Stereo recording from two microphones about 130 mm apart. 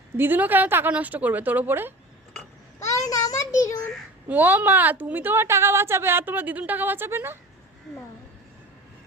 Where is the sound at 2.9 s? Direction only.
25° left (ahead or behind).